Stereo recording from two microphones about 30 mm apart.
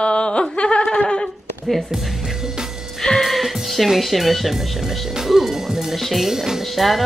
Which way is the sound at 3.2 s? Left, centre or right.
Centre.